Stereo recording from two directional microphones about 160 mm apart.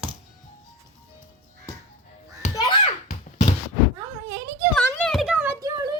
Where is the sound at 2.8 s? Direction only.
45° left (ahead or behind).